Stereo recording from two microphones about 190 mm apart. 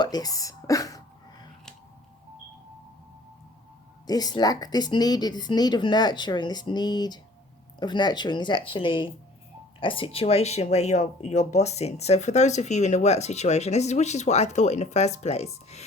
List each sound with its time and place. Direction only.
0.0 s speech: 20° left (ahead or behind)
4.0 s speech: 20° left (ahead or behind)